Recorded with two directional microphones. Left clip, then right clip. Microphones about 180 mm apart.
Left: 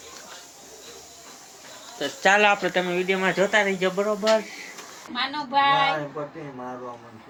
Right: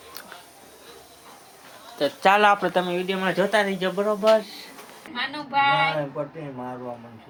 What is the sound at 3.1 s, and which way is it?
Speech, centre (ahead or behind).